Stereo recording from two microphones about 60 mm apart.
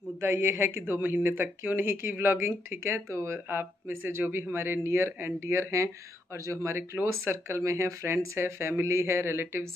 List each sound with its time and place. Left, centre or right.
0.2 s speech: right